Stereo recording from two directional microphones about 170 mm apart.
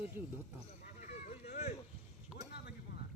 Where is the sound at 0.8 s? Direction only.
50° left (ahead or behind).